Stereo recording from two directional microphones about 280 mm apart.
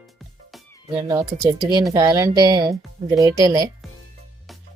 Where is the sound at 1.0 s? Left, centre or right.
Centre.